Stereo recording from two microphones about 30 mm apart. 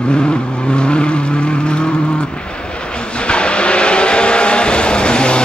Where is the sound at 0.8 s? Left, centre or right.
Left.